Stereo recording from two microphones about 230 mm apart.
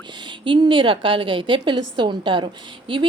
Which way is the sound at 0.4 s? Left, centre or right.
Right.